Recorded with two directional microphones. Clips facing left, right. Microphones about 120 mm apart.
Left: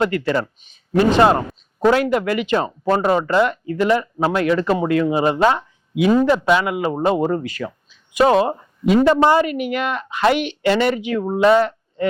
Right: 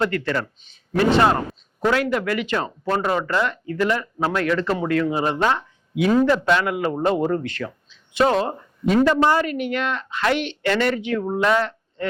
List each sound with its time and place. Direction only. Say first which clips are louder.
0.0 s speech: left 3 dB; 15° left (ahead or behind)